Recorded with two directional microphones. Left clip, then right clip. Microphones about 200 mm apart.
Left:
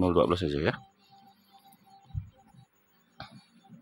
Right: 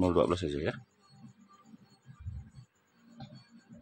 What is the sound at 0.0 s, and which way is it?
Speech, 15° left (ahead or behind).